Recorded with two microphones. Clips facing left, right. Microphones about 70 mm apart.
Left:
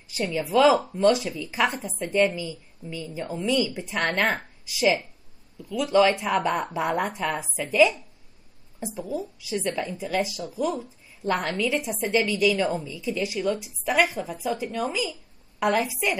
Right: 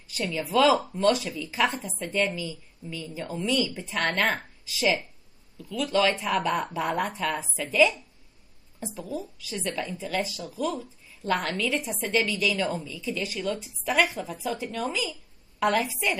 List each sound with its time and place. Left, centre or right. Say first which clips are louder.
0.3 s speech: left 2 dB; centre
0.7 s a woman's voice: left 3 dB; centre
3.3 s a woman's voice: left 2 dB; centre
4.2 s a woman's voice: left 2 dB; centre
7.1 s speech: left 1 dB; centre
7.7 s a woman's voice: left 2 dB; centre